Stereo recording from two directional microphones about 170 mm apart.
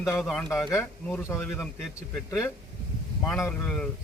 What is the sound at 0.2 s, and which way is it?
Speech, 5° left (ahead or behind).